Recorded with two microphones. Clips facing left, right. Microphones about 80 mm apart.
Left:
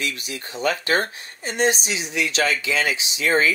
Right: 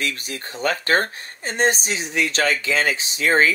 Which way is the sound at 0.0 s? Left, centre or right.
Right.